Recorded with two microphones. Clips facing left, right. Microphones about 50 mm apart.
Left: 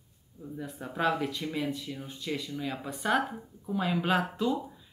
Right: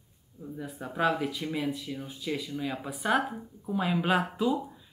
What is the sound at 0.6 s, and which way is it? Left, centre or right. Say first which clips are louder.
Speech: right 2 dB; centre.